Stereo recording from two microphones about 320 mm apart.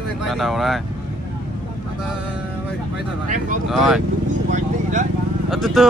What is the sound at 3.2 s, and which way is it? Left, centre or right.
Speech, right.